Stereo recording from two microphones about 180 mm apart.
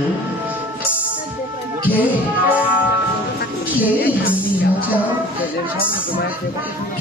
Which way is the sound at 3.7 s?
10° right (ahead or behind).